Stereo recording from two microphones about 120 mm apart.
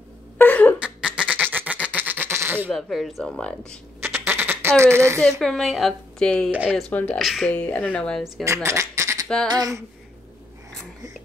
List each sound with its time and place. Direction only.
0.4 s cough: 15° left (ahead or behind)
0.7 s goat: 10° right (ahead or behind)
2.7 s speech: centre (ahead or behind)
4.0 s quack: 20° right (ahead or behind)
5.4 s speech: centre (ahead or behind)
6.5 s speech: 10° right (ahead or behind)
6.9 s speech: 15° left (ahead or behind)
7.2 s speech: centre (ahead or behind)
7.5 s speech: 10° left (ahead or behind)
8.6 s bleat: 25° right (ahead or behind)
9.5 s a sound: 30° right (ahead or behind)